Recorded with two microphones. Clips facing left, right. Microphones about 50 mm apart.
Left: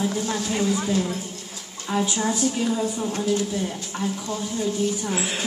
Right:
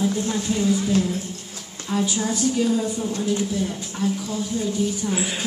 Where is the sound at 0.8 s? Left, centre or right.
Centre.